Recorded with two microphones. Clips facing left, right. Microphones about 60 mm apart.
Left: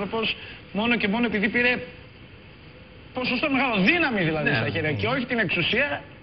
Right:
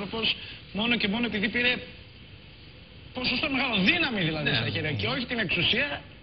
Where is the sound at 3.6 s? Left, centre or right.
Left.